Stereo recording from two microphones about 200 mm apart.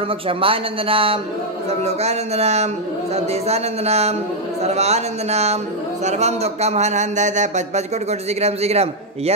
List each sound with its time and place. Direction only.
0.3 s speech: 25° right (ahead or behind)